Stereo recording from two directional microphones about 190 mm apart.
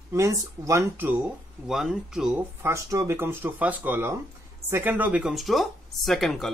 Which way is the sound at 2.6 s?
15° right (ahead or behind).